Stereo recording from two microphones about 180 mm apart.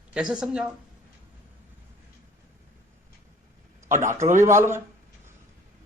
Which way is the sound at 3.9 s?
45° right (ahead or behind).